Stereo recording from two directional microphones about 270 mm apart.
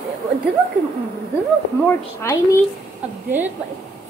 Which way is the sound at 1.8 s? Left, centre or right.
Centre.